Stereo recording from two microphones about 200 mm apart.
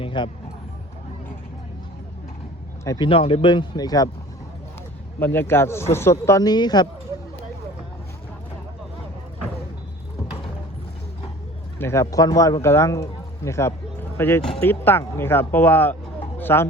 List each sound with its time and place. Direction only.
0.0 s speech: 25° left (ahead or behind)
2.8 s speech: 15° left (ahead or behind)
3.1 s speech: 30° left (ahead or behind)
5.2 s speech: 10° left (ahead or behind)
11.8 s speech: 15° left (ahead or behind)